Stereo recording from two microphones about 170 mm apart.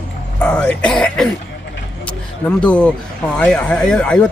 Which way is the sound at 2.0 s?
5° left (ahead or behind).